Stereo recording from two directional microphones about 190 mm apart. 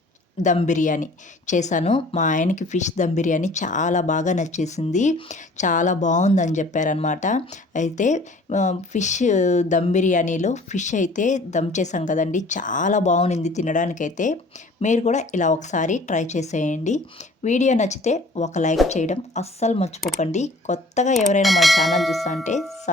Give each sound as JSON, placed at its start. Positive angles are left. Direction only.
{"t": 0.4, "sound": "speech", "side_deg": 40}
{"t": 21.4, "sound": "bell", "side_deg": 0}